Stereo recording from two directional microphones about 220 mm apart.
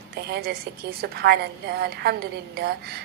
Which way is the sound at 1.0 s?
45° right (ahead or behind).